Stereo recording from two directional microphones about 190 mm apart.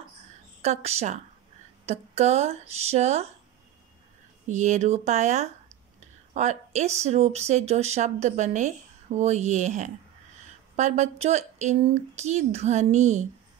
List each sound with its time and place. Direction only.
0.6 s speech: 35° right (ahead or behind)
4.5 s speech: 40° right (ahead or behind)